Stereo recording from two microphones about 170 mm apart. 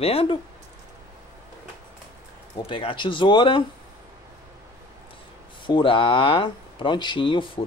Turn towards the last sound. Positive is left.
turn(degrees=30)  # may be behind; listen again after turning